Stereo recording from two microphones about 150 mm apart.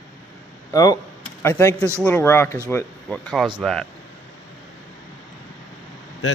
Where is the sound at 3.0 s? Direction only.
Centre (ahead or behind).